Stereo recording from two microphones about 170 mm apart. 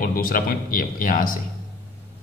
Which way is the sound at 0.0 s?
55° left (ahead or behind).